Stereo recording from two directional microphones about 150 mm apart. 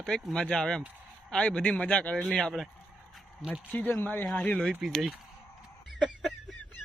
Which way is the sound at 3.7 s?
10° left (ahead or behind).